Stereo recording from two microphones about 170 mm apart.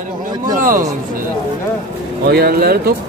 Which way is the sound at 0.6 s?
55° right (ahead or behind).